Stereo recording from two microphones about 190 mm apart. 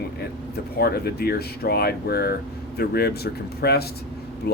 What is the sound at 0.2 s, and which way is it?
Speech, 55° left (ahead or behind).